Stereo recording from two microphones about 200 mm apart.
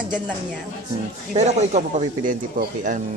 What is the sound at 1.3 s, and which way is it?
Speech, 35° right (ahead or behind).